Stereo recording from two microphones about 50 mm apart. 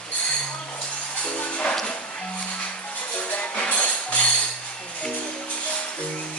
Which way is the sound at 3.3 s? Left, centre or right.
Left.